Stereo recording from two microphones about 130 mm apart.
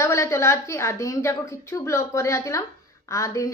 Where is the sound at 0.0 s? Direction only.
20° left (ahead or behind).